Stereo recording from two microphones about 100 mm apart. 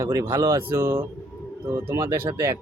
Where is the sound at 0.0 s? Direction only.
30° right (ahead or behind).